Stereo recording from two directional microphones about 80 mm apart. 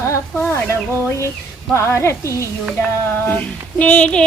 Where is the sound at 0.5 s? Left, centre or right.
Left.